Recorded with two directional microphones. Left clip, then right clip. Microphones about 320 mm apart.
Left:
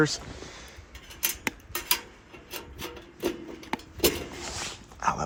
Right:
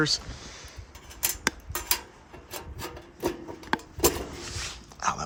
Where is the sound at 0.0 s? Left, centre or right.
Centre.